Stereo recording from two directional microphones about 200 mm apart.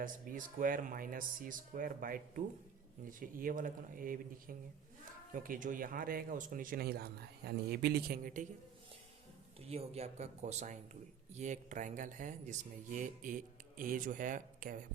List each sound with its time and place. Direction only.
0.0 s speech: 40° right (ahead or behind)
9.6 s speech: 30° right (ahead or behind)